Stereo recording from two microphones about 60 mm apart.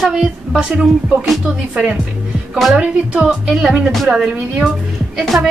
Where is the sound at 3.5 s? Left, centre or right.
Centre.